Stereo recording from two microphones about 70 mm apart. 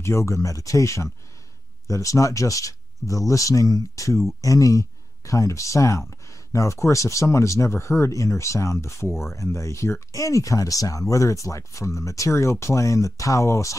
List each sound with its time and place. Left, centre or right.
0.0 s speech: left